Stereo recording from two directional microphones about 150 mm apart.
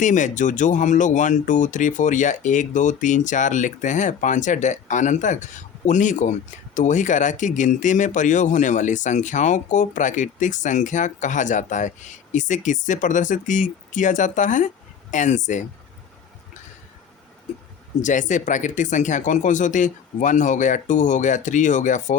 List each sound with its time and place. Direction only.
0.0 s speech: 55° left (ahead or behind)
18.0 s speech: 55° left (ahead or behind)